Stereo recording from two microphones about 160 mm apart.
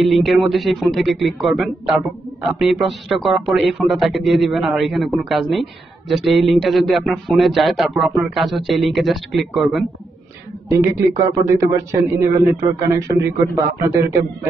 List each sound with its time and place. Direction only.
0.0 s speech: centre (ahead or behind)
10.7 s a man's voice: 20° right (ahead or behind)